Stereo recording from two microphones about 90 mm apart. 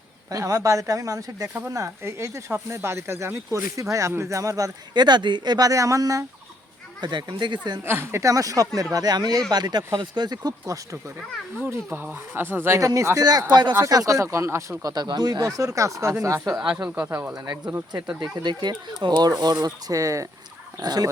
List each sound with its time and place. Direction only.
0.3 s speech: 40° right (ahead or behind)
5.0 s speech: 55° right (ahead or behind); by 6.2 s 40° right (ahead or behind)
7.0 s speech: 55° right (ahead or behind)
7.9 s speech: 30° right (ahead or behind); by 10.8 s 45° right (ahead or behind)
11.6 s speech: 25° right (ahead or behind)
13.5 s speech: 50° right (ahead or behind)
13.8 s speech: 40° right (ahead or behind)
16.6 s speech: 10° right (ahead or behind)
18.2 s speech: 55° right (ahead or behind)